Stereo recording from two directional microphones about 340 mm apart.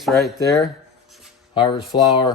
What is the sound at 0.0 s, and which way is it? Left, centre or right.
Speech, centre.